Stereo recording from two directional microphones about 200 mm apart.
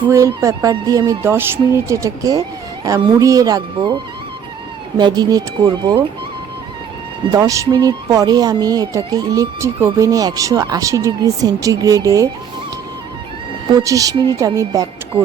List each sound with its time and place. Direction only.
0.1 s speech: 15° right (ahead or behind)
7.3 s speech: 15° right (ahead or behind)
13.7 s speech: 15° right (ahead or behind)